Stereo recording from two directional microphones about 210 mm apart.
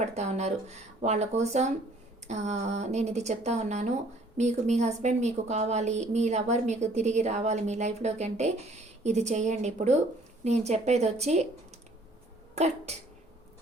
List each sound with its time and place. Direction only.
0.0 s speech: 35° right (ahead or behind)
12.5 s speech: 30° right (ahead or behind)